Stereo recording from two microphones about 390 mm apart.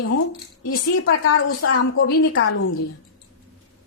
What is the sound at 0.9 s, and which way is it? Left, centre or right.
A woman's voice, left.